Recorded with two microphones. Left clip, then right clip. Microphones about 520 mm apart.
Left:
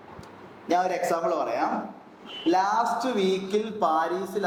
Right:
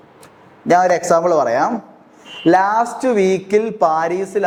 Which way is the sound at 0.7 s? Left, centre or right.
Right.